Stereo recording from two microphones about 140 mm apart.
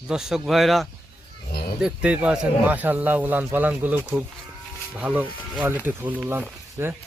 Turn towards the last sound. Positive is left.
turn(degrees=-20)  # may be behind; listen again after turning